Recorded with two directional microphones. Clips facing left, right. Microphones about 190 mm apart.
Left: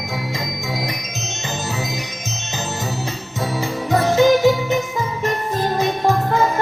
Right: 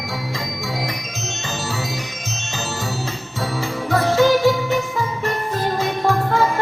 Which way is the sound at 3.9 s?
20° left (ahead or behind).